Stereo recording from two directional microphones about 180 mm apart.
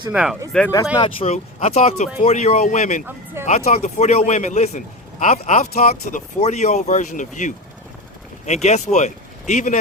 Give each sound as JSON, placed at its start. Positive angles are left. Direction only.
{"t": 0.1, "sound": "speech", "side_deg": -5}
{"t": 0.5, "sound": "speech", "side_deg": 5}
{"t": 0.9, "sound": "speech", "side_deg": 30}